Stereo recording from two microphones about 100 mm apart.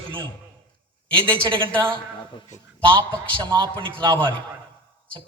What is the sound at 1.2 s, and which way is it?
Speech, 55° right (ahead or behind).